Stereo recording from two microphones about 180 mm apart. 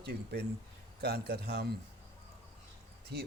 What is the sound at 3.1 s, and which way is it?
Speech, 65° right (ahead or behind).